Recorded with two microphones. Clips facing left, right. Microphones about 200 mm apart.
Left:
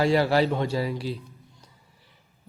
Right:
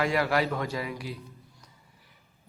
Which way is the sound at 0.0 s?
30° left (ahead or behind).